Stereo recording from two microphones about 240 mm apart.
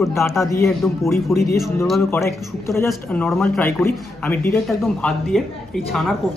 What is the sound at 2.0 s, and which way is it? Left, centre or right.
A man's voice, centre.